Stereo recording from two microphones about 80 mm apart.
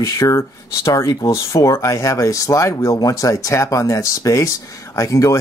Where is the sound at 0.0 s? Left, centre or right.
Left.